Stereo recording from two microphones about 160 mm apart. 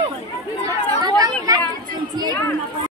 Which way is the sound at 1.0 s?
25° right (ahead or behind).